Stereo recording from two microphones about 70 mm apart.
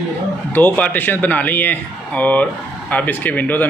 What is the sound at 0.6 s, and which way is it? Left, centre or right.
Speech, left.